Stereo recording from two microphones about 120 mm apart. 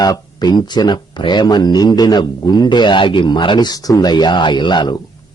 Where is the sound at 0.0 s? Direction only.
35° left (ahead or behind).